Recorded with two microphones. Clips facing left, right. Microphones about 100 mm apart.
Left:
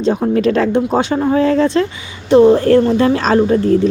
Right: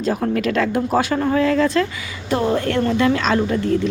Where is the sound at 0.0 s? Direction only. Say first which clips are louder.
Left 6 dB; 25° left (ahead or behind).